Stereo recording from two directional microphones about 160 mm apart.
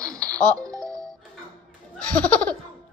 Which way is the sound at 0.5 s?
20° right (ahead or behind).